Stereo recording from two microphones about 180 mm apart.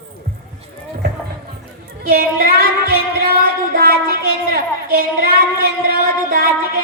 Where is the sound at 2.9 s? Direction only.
55° right (ahead or behind).